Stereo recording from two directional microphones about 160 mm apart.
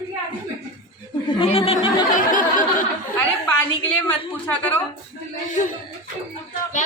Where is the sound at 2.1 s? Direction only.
55° left (ahead or behind).